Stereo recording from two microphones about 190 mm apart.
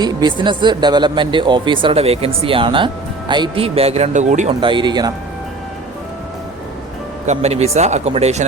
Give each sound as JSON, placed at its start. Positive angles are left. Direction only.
{"t": 0.0, "sound": "speech", "side_deg": -20}
{"t": 4.6, "sound": "speech", "side_deg": -25}
{"t": 7.3, "sound": "speech", "side_deg": -35}